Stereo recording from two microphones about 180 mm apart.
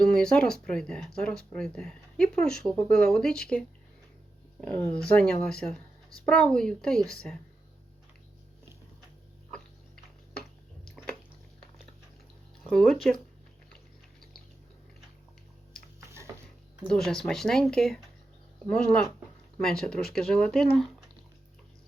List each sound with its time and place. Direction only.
0.0 s speech: 5° left (ahead or behind)
4.6 s speech: 5° left (ahead or behind)
12.6 s speech: centre (ahead or behind)
16.0 s a sound: 15° right (ahead or behind)
16.8 s speech: 5° left (ahead or behind)